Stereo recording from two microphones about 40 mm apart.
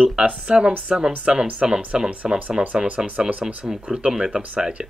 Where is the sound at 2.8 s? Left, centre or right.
Right.